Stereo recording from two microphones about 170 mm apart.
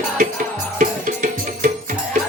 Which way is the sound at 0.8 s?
50° right (ahead or behind).